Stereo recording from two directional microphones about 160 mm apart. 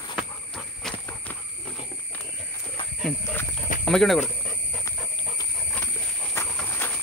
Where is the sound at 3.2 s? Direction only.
15° left (ahead or behind).